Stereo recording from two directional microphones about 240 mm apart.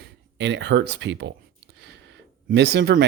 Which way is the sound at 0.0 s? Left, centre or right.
Right.